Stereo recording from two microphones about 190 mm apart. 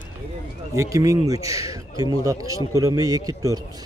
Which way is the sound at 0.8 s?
15° right (ahead or behind).